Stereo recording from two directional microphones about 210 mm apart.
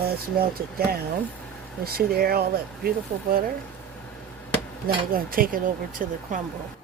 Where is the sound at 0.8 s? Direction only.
45° right (ahead or behind).